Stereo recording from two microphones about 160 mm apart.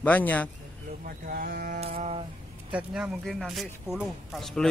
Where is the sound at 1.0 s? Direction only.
60° right (ahead or behind).